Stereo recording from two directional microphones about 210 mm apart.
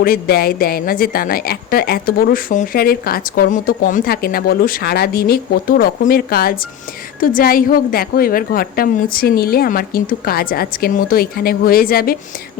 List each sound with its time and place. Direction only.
0.0 s speech: 45° left (ahead or behind)